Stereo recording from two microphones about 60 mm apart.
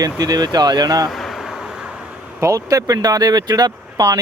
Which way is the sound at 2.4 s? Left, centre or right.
Right.